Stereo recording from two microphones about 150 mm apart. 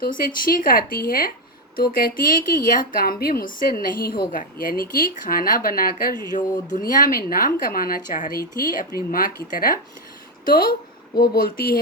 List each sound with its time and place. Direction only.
0.0 s speech: 65° left (ahead or behind)
11.3 s speech: 85° left